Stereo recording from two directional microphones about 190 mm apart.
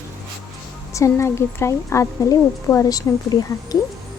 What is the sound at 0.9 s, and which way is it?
Speech, 15° left (ahead or behind).